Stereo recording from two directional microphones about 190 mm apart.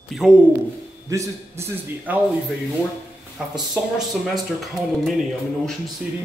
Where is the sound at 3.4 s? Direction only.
5° right (ahead or behind).